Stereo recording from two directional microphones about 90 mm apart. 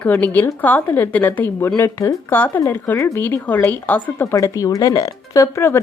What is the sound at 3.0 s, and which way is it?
Speech, 35° left (ahead or behind).